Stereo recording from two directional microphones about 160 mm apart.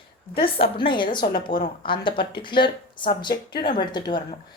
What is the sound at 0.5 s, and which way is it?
A woman's voice, 35° left (ahead or behind).